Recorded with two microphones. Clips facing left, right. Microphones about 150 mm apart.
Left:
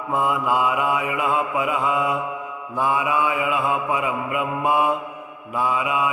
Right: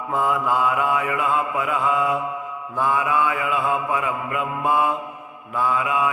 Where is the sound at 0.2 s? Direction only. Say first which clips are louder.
Even; 10° left (ahead or behind).